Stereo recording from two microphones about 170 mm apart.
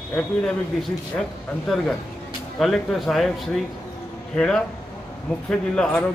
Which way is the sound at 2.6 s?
Centre (ahead or behind).